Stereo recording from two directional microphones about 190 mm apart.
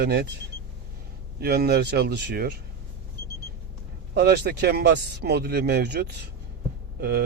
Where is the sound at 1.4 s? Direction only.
55° right (ahead or behind).